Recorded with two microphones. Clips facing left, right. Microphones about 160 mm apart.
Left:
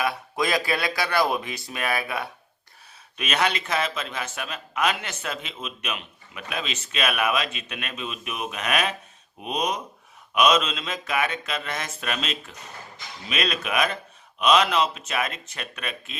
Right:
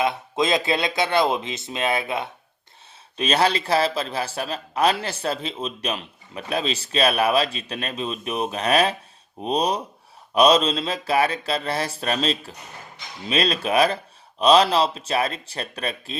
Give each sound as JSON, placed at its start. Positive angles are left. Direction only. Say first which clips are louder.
{"t": 0.0, "sound": "a man's voice", "louder": "right 3 dB", "side_deg": -20}